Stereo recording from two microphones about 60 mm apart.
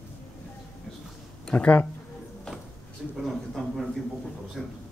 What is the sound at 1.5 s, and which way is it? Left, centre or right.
Speech, left.